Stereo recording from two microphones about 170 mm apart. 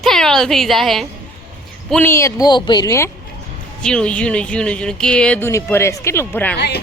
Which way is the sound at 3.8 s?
5° left (ahead or behind).